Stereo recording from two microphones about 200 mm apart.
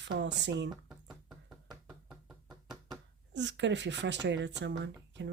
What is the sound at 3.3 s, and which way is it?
Speech, 65° right (ahead or behind).